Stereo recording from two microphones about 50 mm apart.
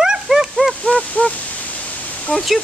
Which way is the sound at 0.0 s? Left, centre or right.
Centre.